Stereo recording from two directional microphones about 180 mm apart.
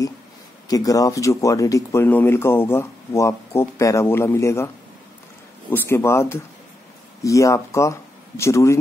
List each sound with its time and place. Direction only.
0.7 s speech: 20° left (ahead or behind)
5.7 s speech: 10° left (ahead or behind)